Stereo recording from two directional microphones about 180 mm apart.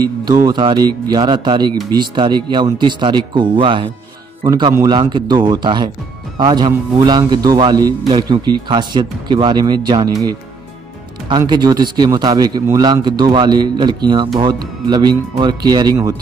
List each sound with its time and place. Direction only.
0.0 s speech: 25° right (ahead or behind)
11.2 s speech: 25° right (ahead or behind)